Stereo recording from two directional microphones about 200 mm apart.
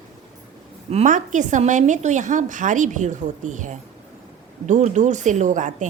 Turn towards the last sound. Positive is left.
turn(degrees=-40)  # may be behind; listen again after turning